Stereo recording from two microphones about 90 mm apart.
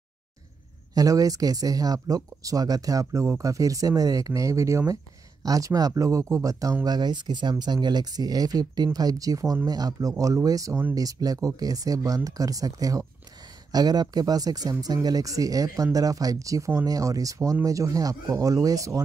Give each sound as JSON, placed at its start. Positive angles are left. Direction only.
{"t": 0.9, "sound": "speech", "side_deg": -40}